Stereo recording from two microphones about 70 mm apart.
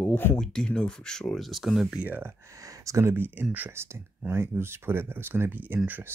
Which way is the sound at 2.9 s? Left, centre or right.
Right.